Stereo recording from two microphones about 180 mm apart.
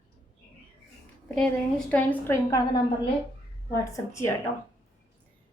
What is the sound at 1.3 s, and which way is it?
A woman's voice, 5° left (ahead or behind).